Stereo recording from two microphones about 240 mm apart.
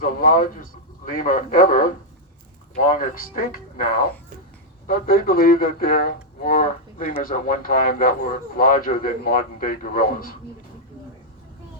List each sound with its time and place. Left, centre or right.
0.0 s speech: left